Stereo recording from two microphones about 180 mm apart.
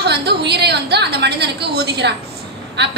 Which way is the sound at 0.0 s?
65° right (ahead or behind).